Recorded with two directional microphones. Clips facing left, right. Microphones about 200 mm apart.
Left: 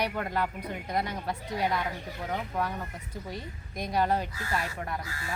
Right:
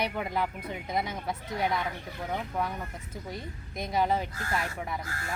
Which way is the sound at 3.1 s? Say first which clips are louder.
Left 1 dB; 20° right (ahead or behind).